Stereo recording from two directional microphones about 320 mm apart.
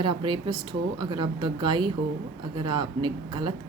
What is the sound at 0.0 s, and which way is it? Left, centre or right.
Speech, centre.